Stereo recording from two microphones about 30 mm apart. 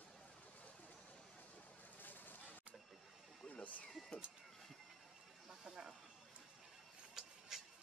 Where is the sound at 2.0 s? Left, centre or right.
Left.